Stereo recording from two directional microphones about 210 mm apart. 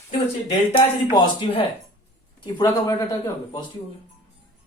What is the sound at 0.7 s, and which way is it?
Speech, 25° left (ahead or behind).